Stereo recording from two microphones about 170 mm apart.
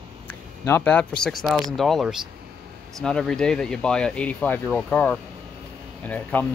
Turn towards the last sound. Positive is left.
turn(degrees=10)  # may be behind; listen again after turning